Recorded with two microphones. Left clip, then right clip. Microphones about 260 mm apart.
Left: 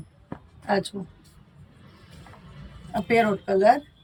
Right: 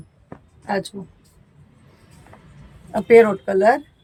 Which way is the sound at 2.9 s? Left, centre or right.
Right.